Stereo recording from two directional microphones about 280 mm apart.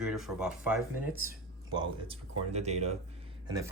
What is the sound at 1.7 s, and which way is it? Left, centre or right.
Speech, centre.